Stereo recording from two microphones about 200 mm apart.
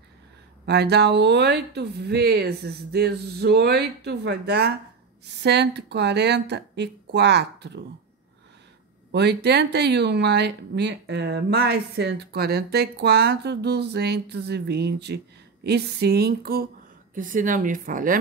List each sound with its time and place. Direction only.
0.7 s speech: 55° right (ahead or behind)
9.1 s speech: 55° right (ahead or behind)
15.6 s a sound: 55° right (ahead or behind)
17.1 s speech: 40° right (ahead or behind)